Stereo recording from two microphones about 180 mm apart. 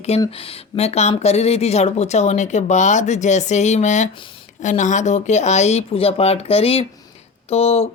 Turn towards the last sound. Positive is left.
turn(degrees=35)  # may be behind; listen again after turning